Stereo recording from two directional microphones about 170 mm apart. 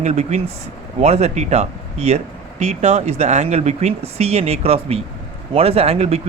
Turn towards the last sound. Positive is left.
turn(degrees=-35)  # may be behind; listen again after turning